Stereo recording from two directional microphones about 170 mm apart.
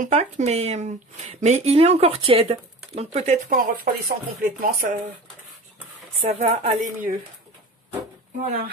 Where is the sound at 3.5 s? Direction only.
55° right (ahead or behind).